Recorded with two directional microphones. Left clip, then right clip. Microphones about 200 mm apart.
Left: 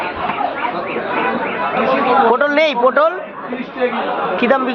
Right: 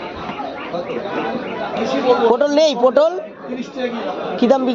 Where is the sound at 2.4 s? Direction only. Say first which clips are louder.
Even; 35° right (ahead or behind).